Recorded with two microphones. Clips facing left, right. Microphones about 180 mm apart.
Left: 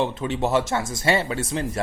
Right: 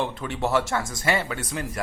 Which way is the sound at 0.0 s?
20° left (ahead or behind).